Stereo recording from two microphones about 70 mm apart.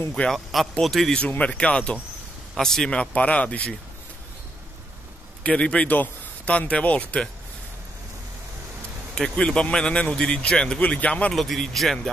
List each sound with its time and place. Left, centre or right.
0.3 s speech: centre
1.4 s a man's voice: centre
5.4 s a man's voice: centre
9.1 s a man's voice: centre
11.3 s speech: centre